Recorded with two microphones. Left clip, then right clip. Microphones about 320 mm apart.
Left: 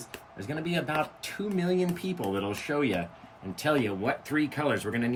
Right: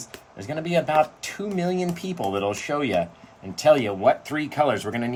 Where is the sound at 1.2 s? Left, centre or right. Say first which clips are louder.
Right 4 dB; centre.